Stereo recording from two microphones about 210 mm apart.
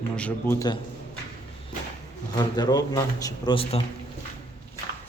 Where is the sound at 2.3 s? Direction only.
20° left (ahead or behind).